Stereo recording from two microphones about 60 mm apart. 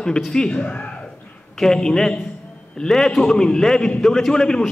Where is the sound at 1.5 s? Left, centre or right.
Centre.